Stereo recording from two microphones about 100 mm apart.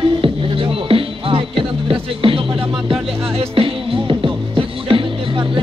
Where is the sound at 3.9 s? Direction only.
55° right (ahead or behind).